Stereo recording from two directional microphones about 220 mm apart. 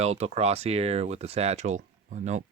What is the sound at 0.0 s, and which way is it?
Speech, 30° right (ahead or behind).